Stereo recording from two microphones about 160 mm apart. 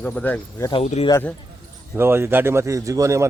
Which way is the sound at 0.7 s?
40° left (ahead or behind).